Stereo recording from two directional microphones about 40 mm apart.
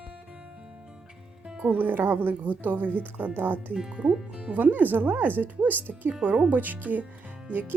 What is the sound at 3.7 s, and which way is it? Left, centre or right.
Speech, centre.